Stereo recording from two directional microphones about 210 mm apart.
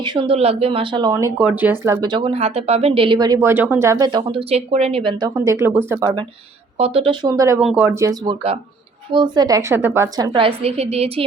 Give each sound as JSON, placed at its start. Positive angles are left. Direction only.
{"t": 0.0, "sound": "speech", "side_deg": -25}
{"t": 5.4, "sound": "speech", "side_deg": -15}
{"t": 6.7, "sound": "speech", "side_deg": -25}
{"t": 7.6, "sound": "speech", "side_deg": -5}
{"t": 8.2, "sound": "speech", "side_deg": -25}